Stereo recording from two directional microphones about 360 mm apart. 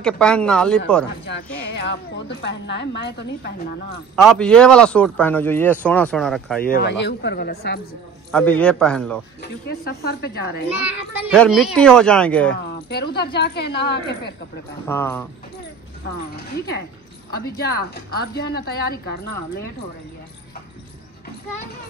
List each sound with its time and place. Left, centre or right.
0.0 s a man's voice: centre
1.2 s a woman's voice: left
4.1 s a man's voice: centre
6.6 s a woman's voice: left
8.3 s a man's voice: centre
9.4 s a woman's voice: left
11.2 s a man's voice: centre
12.5 s a woman's voice: left
14.9 s speech: centre
17.6 s a woman's voice: left